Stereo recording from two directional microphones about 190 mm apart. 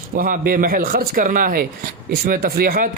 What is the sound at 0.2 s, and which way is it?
Speech, 50° right (ahead or behind).